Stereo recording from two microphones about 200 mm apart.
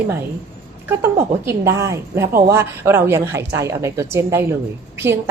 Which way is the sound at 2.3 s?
45° right (ahead or behind).